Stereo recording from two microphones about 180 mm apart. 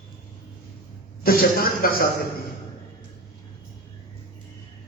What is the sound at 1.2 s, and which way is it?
Speech, 55° left (ahead or behind).